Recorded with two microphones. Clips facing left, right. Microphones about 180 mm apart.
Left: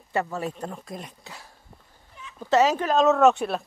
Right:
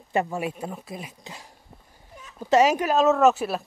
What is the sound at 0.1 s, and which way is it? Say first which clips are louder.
Speech: right 2 dB; 15° right (ahead or behind).